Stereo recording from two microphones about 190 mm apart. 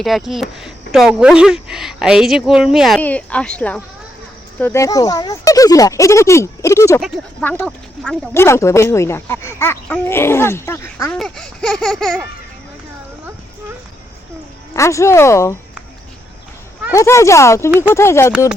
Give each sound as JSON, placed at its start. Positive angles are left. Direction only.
{"t": 0.0, "sound": "a woman's voice", "side_deg": 0}
{"t": 11.2, "sound": "a woman's voice", "side_deg": 0}
{"t": 14.7, "sound": "speech", "side_deg": 15}
{"t": 16.9, "sound": "speech", "side_deg": 15}